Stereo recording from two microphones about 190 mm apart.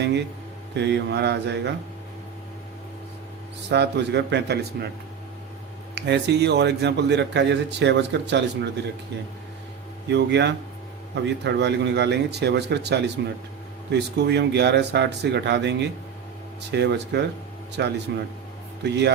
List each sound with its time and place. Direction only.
0.0 s a man's voice: 65° right (ahead or behind)
3.7 s a man's voice: 65° right (ahead or behind)
5.9 s a man's voice: 65° right (ahead or behind)
10.1 s a man's voice: 65° right (ahead or behind)